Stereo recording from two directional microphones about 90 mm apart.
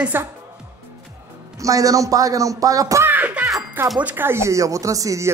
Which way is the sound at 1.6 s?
40° right (ahead or behind).